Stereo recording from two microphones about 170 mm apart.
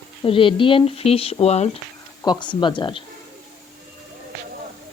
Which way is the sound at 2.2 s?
25° left (ahead or behind).